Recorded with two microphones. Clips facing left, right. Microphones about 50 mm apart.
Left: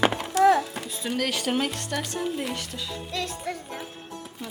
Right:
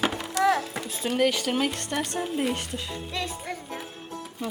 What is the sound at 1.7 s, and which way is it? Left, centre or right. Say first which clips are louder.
Speech: right 1 dB; right.